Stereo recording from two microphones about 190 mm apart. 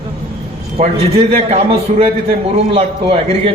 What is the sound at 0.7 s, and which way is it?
A man's voice, 30° right (ahead or behind).